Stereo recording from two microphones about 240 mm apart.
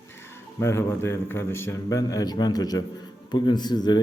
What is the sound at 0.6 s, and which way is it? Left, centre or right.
Speech, centre.